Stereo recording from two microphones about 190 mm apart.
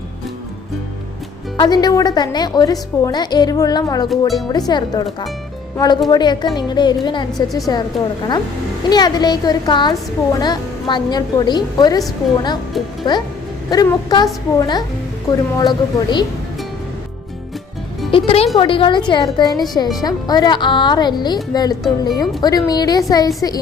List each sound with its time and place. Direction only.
1.5 s a woman's voice: 20° left (ahead or behind)
7.9 s a woman's voice: centre (ahead or behind)
8.9 s a woman's voice: 20° left (ahead or behind)
13.7 s a woman's voice: 20° left (ahead or behind)
18.1 s a woman's voice: 30° left (ahead or behind)